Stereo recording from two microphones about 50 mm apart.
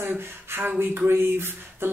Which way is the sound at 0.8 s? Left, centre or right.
Right.